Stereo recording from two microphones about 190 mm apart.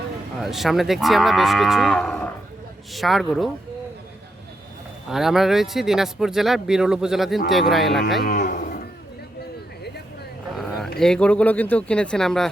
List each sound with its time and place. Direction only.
0.3 s speech: centre (ahead or behind)
5.1 s speech: centre (ahead or behind)
8.3 s cattle: 45° left (ahead or behind)
10.9 s speech: 5° left (ahead or behind)